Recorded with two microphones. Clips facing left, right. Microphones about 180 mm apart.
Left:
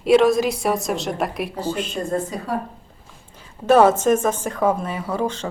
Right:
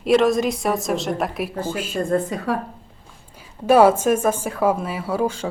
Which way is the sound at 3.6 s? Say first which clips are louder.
Even; 10° right (ahead or behind).